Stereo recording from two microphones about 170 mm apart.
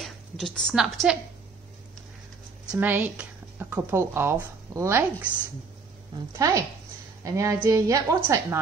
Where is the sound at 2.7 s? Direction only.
10° right (ahead or behind).